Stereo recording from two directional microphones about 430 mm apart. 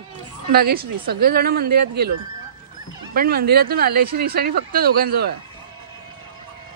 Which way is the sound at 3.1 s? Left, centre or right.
Right.